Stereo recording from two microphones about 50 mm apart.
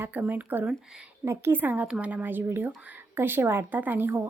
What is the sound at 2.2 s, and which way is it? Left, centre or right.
Speech, right.